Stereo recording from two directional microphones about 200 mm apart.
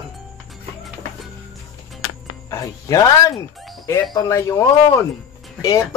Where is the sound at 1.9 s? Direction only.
90° left.